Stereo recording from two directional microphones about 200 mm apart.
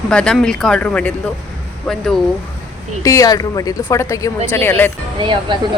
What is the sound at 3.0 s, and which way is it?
Speech, 15° left (ahead or behind).